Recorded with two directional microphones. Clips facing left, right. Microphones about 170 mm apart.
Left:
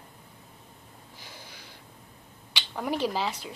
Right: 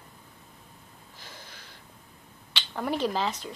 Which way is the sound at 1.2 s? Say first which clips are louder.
Even; 10° left (ahead or behind).